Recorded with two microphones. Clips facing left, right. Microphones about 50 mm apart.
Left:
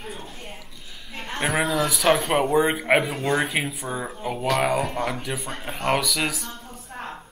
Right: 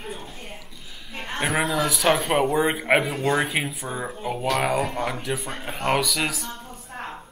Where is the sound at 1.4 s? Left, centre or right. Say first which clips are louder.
Even; centre.